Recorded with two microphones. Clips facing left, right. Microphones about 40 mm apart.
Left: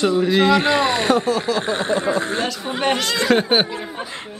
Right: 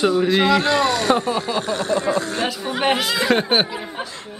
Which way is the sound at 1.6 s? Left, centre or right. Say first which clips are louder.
Left 1 dB; left.